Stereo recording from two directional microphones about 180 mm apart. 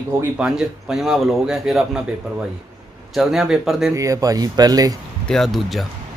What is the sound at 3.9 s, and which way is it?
Speech, 20° right (ahead or behind).